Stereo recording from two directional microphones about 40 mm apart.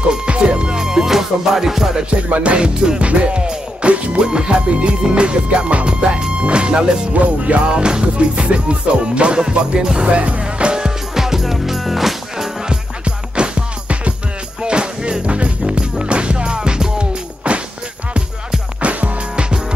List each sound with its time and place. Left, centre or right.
0.3 s music: right
2.2 s music: right
11.1 s music: centre
12.6 s music: right
18.8 s music: right